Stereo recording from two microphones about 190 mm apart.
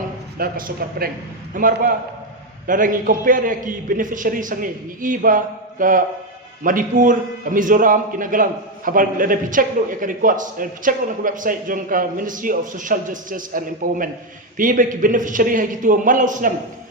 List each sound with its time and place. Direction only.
0.3 s a man's voice: 50° right (ahead or behind)